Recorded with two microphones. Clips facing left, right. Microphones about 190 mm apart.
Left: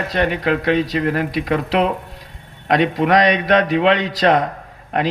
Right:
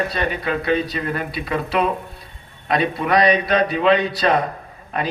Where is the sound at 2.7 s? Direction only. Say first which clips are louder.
Left 3 dB; 90° left.